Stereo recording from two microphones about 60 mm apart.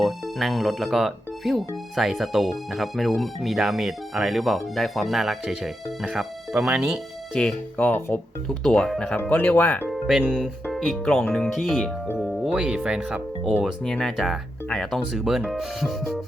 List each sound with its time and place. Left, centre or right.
0.0 s speech: centre
7.3 s speech: centre
7.8 s speech: left
8.4 s speech: centre
9.3 s speech: left
10.2 s speech: centre
12.2 s music: centre
12.5 s speech: centre
13.8 s speech: centre